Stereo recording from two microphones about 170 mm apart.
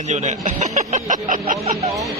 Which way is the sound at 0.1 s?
45° right (ahead or behind).